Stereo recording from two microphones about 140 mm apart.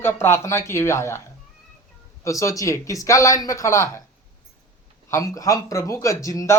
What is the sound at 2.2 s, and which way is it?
Speech, 20° left (ahead or behind).